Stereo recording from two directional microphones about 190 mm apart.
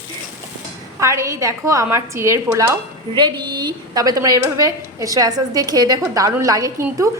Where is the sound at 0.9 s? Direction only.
15° right (ahead or behind).